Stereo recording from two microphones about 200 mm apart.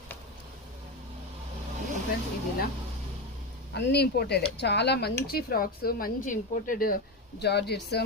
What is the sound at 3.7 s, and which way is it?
A woman's voice, 60° left (ahead or behind).